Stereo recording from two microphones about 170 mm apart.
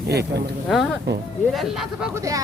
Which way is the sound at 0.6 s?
Centre (ahead or behind).